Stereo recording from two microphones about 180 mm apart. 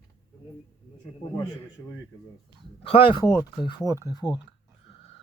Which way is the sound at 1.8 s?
20° left (ahead or behind).